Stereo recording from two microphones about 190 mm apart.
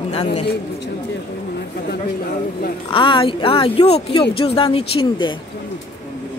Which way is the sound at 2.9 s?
25° left (ahead or behind).